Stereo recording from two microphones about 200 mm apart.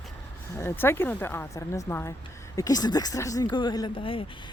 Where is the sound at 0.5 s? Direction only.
10° left (ahead or behind).